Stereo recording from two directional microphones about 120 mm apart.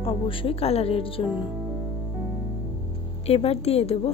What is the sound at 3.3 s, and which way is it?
Speech, 55° left (ahead or behind).